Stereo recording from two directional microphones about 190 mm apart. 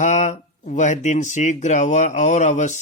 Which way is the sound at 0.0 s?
40° left (ahead or behind).